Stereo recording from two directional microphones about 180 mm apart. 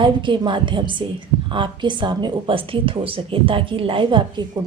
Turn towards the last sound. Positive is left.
turn(degrees=-25)  # may be behind; listen again after turning